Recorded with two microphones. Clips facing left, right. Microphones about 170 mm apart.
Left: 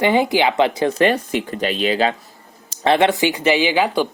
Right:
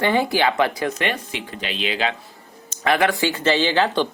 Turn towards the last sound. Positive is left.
turn(degrees=10)  # may be behind; listen again after turning